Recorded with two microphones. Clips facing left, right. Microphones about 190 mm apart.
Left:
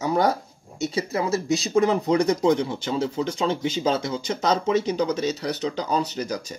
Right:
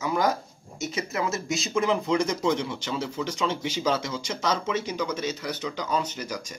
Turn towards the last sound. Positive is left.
turn(degrees=35)  # may be behind; listen again after turning